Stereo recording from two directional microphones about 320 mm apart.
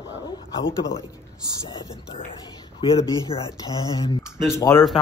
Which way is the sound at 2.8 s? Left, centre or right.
Centre.